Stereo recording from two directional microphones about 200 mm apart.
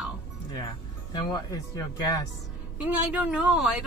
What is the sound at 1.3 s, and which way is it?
Speech, 15° left (ahead or behind).